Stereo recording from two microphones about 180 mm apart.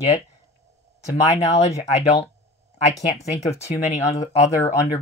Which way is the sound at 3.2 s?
35° left (ahead or behind).